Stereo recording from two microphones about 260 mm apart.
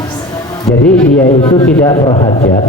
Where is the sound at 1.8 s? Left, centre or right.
Centre.